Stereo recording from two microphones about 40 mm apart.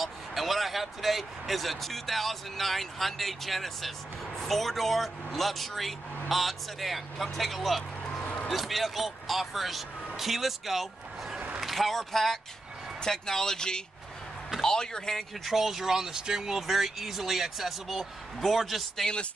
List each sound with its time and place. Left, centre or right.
0.0 s speech: centre
15.4 s speech: centre